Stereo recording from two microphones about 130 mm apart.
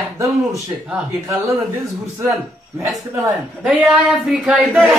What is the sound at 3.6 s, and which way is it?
Speech, 5° right (ahead or behind).